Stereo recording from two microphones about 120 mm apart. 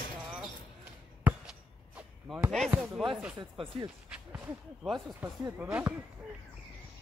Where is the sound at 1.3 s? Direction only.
10° right (ahead or behind).